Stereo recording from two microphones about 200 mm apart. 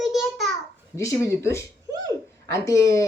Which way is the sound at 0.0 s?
Centre (ahead or behind).